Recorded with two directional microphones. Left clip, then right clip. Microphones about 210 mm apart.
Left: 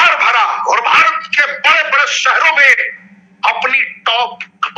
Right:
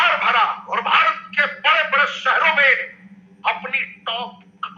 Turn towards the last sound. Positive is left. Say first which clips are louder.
# left 12 dB
turn(degrees=40)  # may be behind; listen again after turning